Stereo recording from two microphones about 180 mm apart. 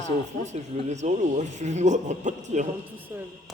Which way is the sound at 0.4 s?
40° right (ahead or behind).